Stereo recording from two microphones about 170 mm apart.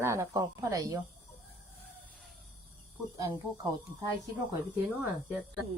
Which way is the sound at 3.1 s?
20° right (ahead or behind).